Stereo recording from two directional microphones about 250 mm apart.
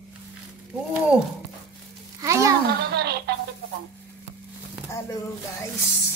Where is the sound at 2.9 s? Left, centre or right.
Right.